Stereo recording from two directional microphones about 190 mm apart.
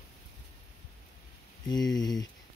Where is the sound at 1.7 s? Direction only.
20° left (ahead or behind).